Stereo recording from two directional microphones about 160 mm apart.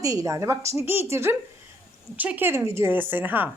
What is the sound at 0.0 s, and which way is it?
Speech, 20° right (ahead or behind).